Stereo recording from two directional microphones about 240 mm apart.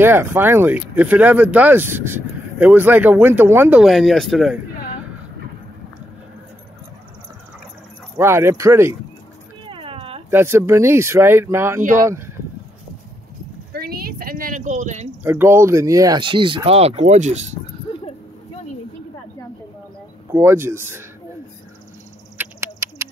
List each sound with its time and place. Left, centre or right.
0.0 s speech: centre
8.2 s speech: centre
9.7 s dog: right
10.3 s speech: centre
13.7 s a sound: right
15.2 s speech: centre; by 17.6 s right
20.2 s speech: centre
22.4 s a sound: centre